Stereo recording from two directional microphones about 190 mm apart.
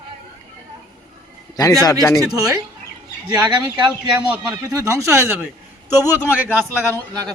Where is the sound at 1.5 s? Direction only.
20° left (ahead or behind).